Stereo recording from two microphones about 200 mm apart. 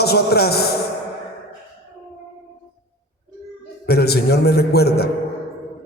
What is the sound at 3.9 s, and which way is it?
A man's voice, 55° left (ahead or behind).